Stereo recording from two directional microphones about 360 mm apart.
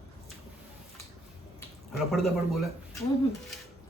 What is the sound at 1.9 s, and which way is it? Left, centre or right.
Speech, centre.